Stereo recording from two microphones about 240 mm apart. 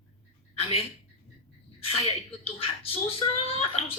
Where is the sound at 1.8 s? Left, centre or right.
Left.